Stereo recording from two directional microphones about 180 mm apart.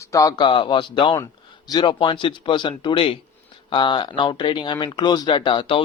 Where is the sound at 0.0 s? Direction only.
20° left (ahead or behind).